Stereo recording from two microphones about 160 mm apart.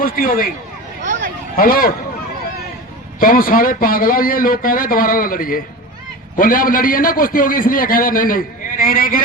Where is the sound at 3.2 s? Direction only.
60° left (ahead or behind).